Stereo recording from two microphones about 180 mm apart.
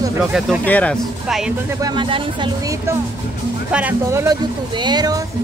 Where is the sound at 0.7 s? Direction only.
10° left (ahead or behind).